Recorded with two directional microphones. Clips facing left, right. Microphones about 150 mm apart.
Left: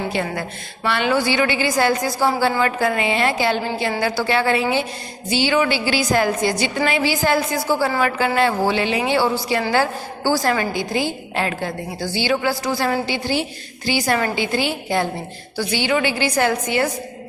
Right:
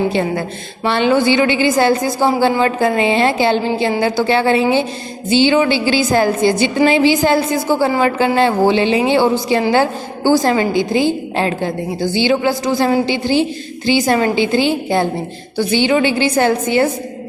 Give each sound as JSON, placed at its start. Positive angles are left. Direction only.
{"t": 0.1, "sound": "a woman's voice", "side_deg": -25}